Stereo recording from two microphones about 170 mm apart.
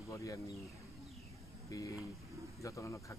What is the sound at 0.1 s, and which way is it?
Speech, 20° left (ahead or behind).